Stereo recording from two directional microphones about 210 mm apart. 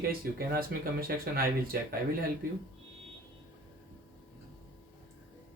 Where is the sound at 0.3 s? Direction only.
45° right (ahead or behind).